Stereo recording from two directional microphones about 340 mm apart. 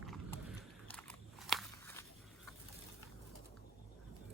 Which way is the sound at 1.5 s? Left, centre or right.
Centre.